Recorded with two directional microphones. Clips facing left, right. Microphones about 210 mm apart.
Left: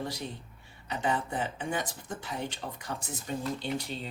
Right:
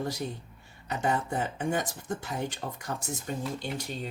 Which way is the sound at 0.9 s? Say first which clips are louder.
Right 2 dB; 45° right (ahead or behind).